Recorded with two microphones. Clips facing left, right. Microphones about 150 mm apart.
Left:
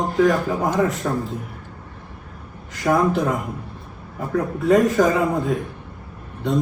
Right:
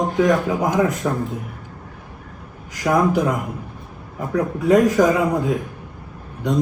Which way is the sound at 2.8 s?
Centre (ahead or behind).